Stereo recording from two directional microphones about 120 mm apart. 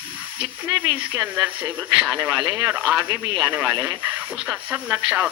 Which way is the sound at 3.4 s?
15° right (ahead or behind).